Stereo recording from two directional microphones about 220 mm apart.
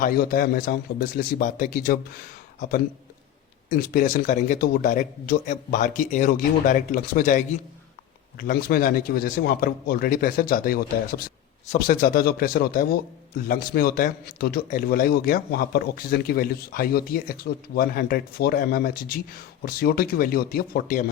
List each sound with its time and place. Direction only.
0.0 s speech: 40° left (ahead or behind)
3.7 s a man's voice: 40° left (ahead or behind)